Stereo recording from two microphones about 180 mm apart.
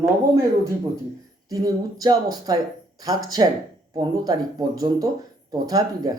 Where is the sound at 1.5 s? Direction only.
20° right (ahead or behind).